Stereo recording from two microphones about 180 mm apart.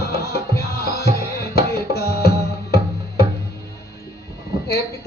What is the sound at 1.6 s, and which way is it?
Tabla, 60° left (ahead or behind).